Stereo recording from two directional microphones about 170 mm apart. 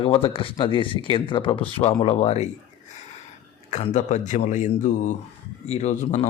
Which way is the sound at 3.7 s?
45° left (ahead or behind).